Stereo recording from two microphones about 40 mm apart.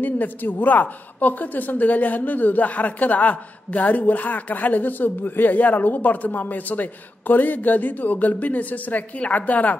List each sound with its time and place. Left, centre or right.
0.0 s a woman's voice: left